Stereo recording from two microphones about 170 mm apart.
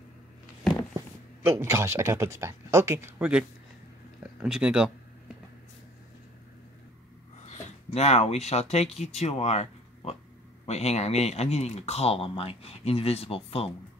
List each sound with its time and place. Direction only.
0.9 s speech: 15° right (ahead or behind)
7.4 s speech: 40° left (ahead or behind)